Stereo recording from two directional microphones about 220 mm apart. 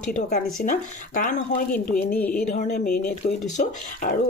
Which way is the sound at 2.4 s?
30° left (ahead or behind).